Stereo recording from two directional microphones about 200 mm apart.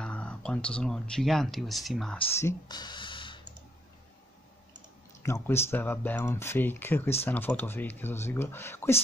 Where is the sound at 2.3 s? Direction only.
15° left (ahead or behind).